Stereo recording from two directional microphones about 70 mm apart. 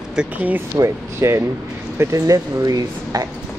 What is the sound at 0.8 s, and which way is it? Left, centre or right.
Speech, right.